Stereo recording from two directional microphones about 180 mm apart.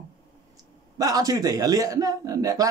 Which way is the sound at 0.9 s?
20° right (ahead or behind).